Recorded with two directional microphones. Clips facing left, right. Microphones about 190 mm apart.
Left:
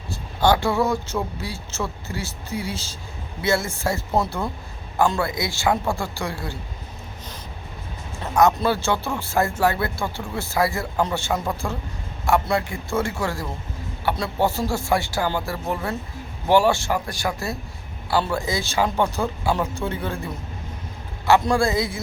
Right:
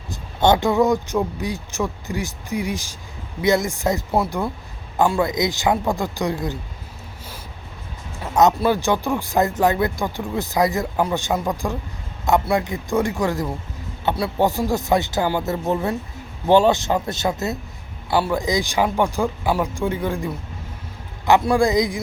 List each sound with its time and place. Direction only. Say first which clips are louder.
0.1 s speech: right 2 dB; 20° right (ahead or behind)
5.0 s speech: right 5 dB; 15° right (ahead or behind)
8.5 s speech: right 3 dB; 15° right (ahead or behind)
21.4 s speech: right 3 dB; 15° right (ahead or behind)